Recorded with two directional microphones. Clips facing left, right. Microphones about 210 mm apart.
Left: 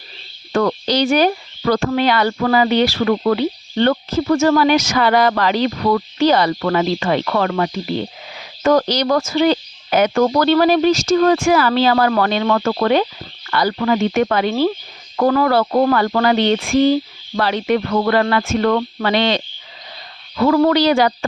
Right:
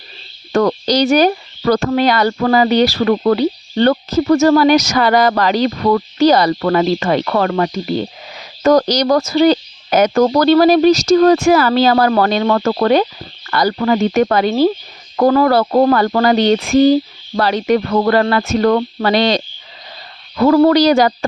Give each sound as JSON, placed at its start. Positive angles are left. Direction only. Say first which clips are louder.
{"t": 0.5, "sound": "speech", "louder": "right 3 dB", "side_deg": -40}